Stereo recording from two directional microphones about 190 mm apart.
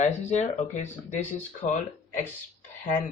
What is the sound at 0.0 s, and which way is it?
Speech, 35° left (ahead or behind).